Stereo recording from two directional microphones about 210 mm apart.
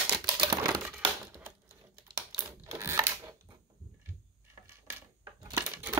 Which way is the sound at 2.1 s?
15° right (ahead or behind).